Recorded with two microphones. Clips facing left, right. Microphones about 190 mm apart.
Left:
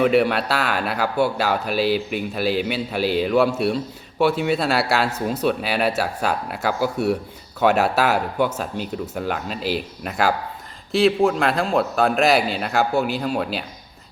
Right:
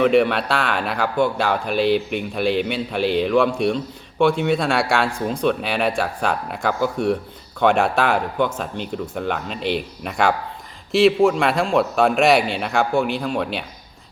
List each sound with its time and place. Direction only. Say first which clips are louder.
0.0 s speech: right 1 dB; 5° left (ahead or behind)